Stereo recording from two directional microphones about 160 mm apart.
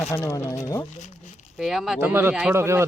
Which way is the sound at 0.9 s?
50° left (ahead or behind).